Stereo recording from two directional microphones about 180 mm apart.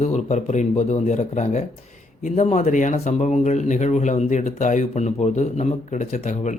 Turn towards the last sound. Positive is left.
turn(degrees=40)  # may be behind; listen again after turning